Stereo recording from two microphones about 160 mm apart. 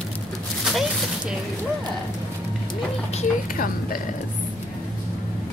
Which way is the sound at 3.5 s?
60° left (ahead or behind).